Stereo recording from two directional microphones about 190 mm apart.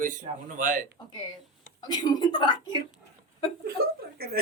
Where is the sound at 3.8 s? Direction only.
50° right (ahead or behind).